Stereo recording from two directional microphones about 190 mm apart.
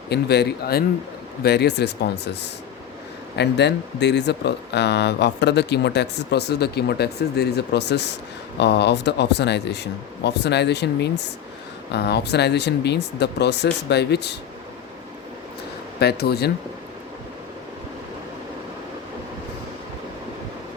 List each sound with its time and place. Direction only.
0.1 s speech: 60° left (ahead or behind)
16.0 s speech: 60° left (ahead or behind)